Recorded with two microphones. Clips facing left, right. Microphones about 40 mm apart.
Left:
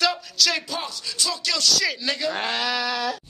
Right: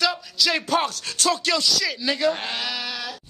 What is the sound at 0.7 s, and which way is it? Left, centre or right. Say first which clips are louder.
Music: right 8 dB; right.